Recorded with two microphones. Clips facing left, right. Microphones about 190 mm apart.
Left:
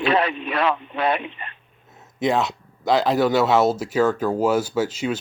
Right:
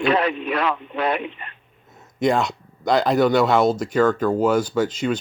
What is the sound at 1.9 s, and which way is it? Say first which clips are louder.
Speech: right 1 dB; 5° left (ahead or behind).